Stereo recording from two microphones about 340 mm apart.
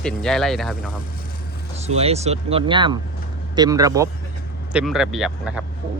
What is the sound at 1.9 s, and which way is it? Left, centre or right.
A man's voice, centre.